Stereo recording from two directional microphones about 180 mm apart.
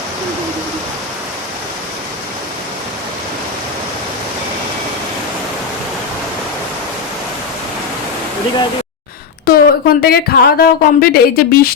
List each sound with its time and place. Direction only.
9.5 s a woman's voice: 60° left (ahead or behind)